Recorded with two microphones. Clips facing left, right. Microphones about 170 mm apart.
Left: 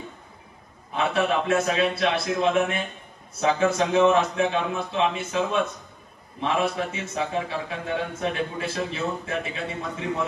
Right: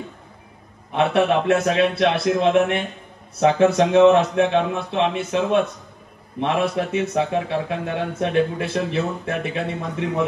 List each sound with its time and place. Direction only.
0.9 s a man's voice: 60° right (ahead or behind)